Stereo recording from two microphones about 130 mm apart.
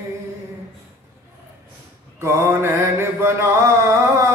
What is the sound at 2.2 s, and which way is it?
Mantra, 20° right (ahead or behind).